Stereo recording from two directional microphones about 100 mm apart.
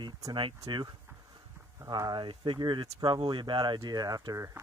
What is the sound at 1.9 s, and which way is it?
Speech, 45° right (ahead or behind).